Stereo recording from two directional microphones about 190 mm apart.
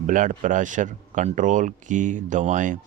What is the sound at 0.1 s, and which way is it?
Speech, 40° right (ahead or behind).